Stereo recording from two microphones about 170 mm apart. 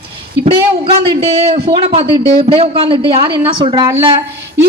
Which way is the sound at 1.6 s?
30° right (ahead or behind).